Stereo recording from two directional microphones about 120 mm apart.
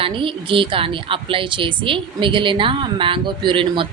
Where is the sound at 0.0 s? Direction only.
45° right (ahead or behind).